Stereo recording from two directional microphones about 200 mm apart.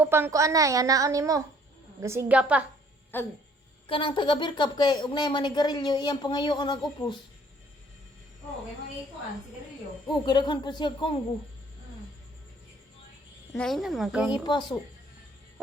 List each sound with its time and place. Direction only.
0.0 s a woman's voice: 10° right (ahead or behind)
3.1 s speech: 10° left (ahead or behind)
3.8 s a woman's voice: 25° left (ahead or behind)
10.2 s a woman's voice: 20° left (ahead or behind)
13.6 s speech: centre (ahead or behind)
14.3 s a woman's voice: 20° left (ahead or behind)